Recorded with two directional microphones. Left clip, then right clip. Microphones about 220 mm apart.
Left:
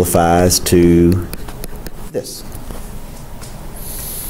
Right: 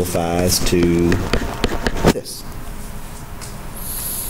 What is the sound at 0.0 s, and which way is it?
Speech, 25° left (ahead or behind).